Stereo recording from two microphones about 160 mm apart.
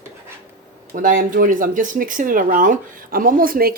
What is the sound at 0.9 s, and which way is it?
Speech, 55° right (ahead or behind).